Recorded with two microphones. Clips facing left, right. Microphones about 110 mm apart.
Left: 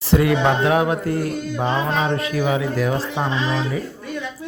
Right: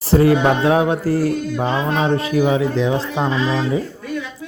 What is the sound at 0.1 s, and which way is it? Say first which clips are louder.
Speech: right 3 dB; 35° right (ahead or behind).